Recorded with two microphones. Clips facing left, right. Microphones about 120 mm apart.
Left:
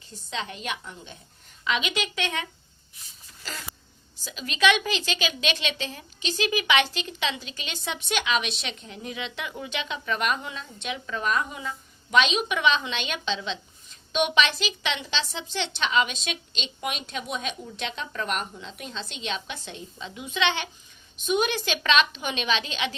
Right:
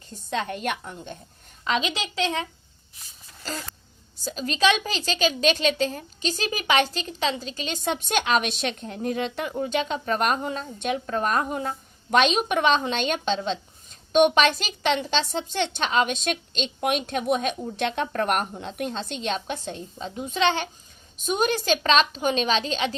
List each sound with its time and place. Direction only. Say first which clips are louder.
0.3 s a woman's voice: right 5 dB; 50° right (ahead or behind)
1.6 s a woman's voice: right 2 dB; 35° right (ahead or behind)
4.2 s a woman's voice: right 2 dB; 40° right (ahead or behind)